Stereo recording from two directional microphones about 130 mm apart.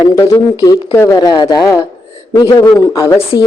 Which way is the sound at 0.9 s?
25° left (ahead or behind).